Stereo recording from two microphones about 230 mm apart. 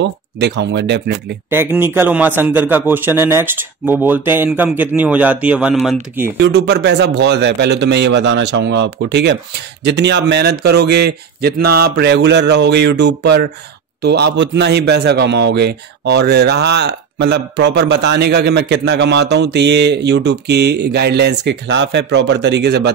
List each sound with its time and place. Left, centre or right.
0.0 s a man's voice: right
1.5 s a man's voice: centre
6.3 s a man's voice: right